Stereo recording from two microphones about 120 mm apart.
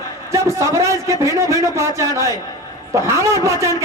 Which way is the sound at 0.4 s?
25° right (ahead or behind).